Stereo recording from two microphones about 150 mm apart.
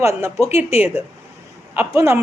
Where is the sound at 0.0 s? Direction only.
20° right (ahead or behind).